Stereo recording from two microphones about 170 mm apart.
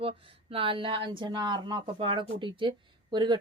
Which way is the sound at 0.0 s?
30° right (ahead or behind).